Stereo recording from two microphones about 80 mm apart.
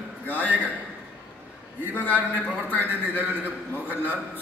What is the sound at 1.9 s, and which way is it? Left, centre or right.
A man's voice, left.